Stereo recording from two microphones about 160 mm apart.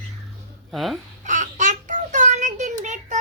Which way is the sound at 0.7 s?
Centre (ahead or behind).